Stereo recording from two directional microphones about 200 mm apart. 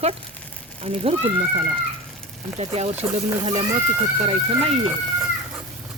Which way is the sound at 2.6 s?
30° right (ahead or behind).